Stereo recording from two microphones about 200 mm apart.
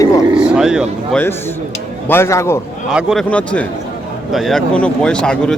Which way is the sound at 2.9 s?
5° right (ahead or behind).